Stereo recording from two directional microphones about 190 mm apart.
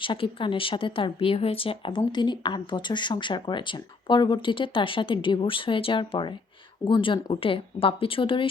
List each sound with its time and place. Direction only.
0.0 s speech: 25° left (ahead or behind)